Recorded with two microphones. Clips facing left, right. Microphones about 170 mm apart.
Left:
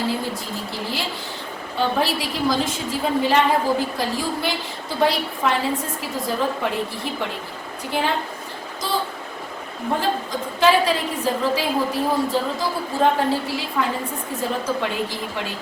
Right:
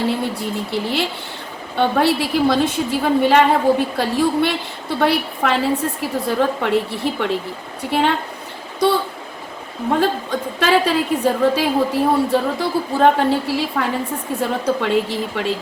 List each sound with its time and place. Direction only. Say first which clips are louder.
0.2 s a woman's voice: right 5 dB; 65° right (ahead or behind)
10.0 s a woman's voice: right 5 dB; 65° right (ahead or behind)